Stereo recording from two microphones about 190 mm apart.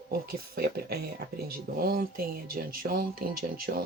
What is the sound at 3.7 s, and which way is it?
Speech, 60° right (ahead or behind).